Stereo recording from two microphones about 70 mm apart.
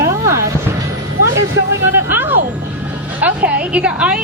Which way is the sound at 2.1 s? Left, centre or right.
Right.